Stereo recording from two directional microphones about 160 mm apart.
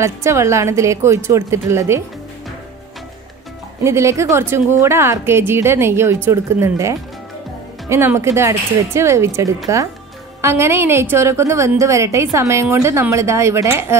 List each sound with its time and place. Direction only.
0.0 s a woman's voice: 20° right (ahead or behind)
3.8 s a woman's voice: 15° right (ahead or behind)